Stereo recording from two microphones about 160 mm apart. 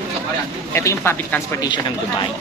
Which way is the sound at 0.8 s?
15° left (ahead or behind).